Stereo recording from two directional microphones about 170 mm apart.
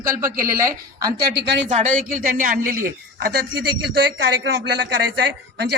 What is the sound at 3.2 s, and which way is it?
A man's voice, 75° right (ahead or behind).